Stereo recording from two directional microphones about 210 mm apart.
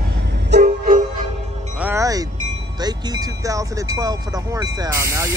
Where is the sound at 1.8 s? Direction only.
15° right (ahead or behind).